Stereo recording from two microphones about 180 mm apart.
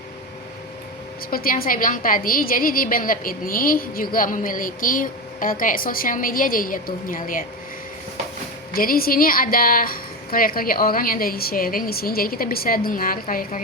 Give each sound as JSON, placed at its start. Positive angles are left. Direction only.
{"t": 1.3, "sound": "a woman's voice", "side_deg": 55}
{"t": 8.7, "sound": "a woman's voice", "side_deg": 55}